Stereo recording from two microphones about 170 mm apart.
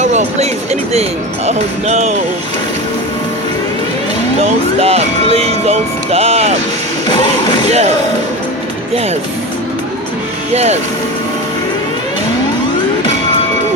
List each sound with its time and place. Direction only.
0.0 s speech: 45° right (ahead or behind)
4.4 s speech: 35° right (ahead or behind)
7.1 s music: 25° left (ahead or behind)
7.7 s speech: 40° right (ahead or behind)
10.5 s speech: 40° right (ahead or behind)